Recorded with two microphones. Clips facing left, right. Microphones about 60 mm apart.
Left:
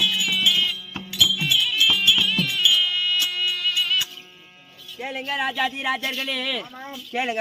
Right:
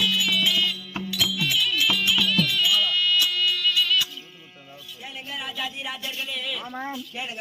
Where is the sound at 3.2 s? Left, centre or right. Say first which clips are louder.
Right 2 dB; centre.